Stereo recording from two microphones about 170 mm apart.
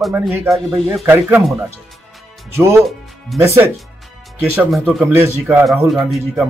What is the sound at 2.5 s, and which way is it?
Speech, 15° right (ahead or behind).